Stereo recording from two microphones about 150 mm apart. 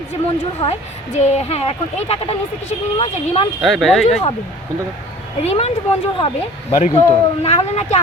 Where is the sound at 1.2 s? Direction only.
45° left (ahead or behind).